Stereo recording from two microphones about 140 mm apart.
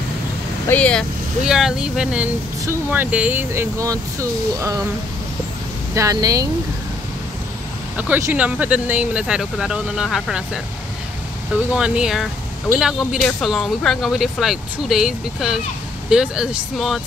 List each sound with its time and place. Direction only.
0.7 s speech: 10° left (ahead or behind)
1.4 s speech: 5° right (ahead or behind); by 4.8 s 20° right (ahead or behind)
5.9 s speech: 25° right (ahead or behind)
8.0 s speech: 15° right (ahead or behind)
11.7 s speech: 5° right (ahead or behind)